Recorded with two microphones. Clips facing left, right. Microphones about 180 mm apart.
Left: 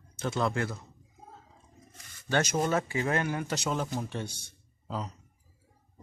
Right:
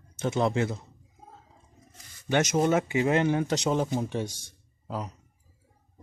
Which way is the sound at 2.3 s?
20° right (ahead or behind).